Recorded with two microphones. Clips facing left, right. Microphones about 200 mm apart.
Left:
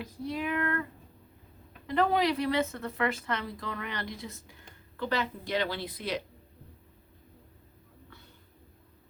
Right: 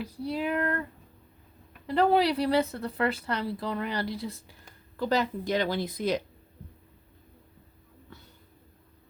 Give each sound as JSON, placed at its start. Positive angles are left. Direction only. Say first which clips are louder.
{"t": 0.0, "sound": "speech", "louder": "right 3 dB", "side_deg": -35}
{"t": 1.9, "sound": "speech", "louder": "right 3 dB", "side_deg": -35}